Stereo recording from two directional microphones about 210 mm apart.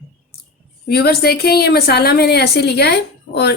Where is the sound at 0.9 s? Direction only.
50° left (ahead or behind).